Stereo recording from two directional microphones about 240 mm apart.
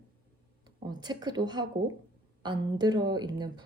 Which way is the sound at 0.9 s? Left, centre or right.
Centre.